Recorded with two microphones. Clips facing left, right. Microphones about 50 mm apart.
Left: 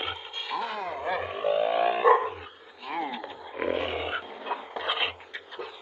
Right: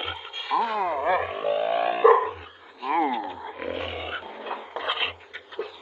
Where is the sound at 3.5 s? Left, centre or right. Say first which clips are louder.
Left 6 dB; centre.